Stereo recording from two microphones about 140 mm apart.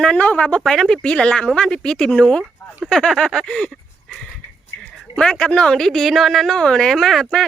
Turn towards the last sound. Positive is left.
turn(degrees=5)  # may be behind; listen again after turning